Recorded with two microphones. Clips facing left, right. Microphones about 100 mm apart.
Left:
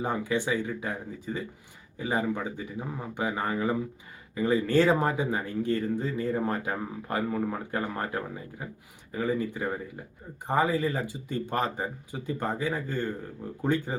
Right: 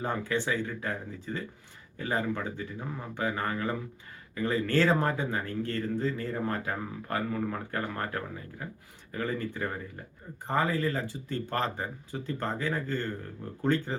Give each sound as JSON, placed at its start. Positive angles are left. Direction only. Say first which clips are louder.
{"t": 0.0, "sound": "speech", "louder": "left 2 dB", "side_deg": 15}